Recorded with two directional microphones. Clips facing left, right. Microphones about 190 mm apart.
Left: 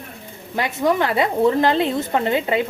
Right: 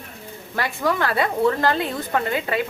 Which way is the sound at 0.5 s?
20° left (ahead or behind).